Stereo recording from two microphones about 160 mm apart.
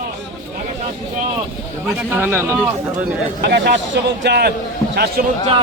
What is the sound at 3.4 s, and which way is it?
A man's voice, 90° right.